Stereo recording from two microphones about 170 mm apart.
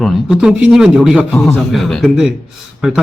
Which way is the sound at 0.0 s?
5° right (ahead or behind).